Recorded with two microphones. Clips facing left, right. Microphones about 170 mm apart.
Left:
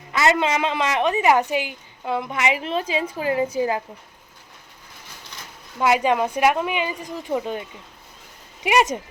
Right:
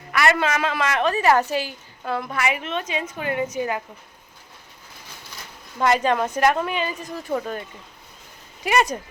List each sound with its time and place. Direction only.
0.1 s a woman's voice: 20° left (ahead or behind)
5.7 s a woman's voice: 10° left (ahead or behind)